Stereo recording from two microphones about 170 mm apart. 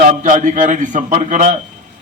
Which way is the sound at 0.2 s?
50° right (ahead or behind).